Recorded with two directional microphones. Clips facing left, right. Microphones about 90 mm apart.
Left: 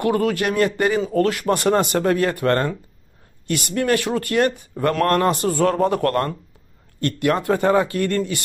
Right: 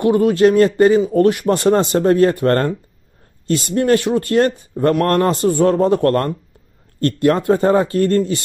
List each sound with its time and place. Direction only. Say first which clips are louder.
0.0 s speech: right 7 dB; 20° right (ahead or behind)